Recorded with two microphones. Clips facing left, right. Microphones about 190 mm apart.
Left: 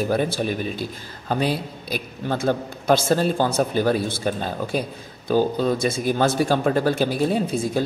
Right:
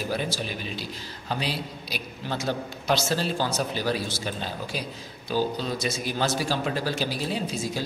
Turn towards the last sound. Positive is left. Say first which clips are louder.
# left 7 dB
turn(degrees=55)  # may be behind; listen again after turning